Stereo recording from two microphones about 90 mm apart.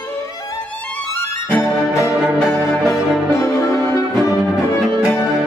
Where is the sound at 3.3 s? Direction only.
35° left (ahead or behind).